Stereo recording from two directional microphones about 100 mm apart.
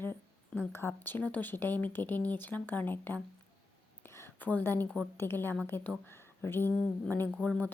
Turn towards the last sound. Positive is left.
turn(degrees=5)  # may be behind; listen again after turning